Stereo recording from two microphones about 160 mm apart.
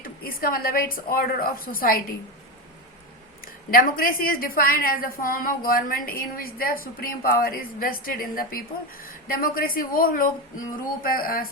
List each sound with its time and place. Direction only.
0.0 s a woman's voice: 65° left (ahead or behind)
3.4 s a woman's voice: 60° left (ahead or behind)